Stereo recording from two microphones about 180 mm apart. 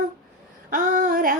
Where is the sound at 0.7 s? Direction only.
50° right (ahead or behind).